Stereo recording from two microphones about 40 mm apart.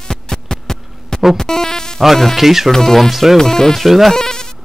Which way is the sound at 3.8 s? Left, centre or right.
Centre.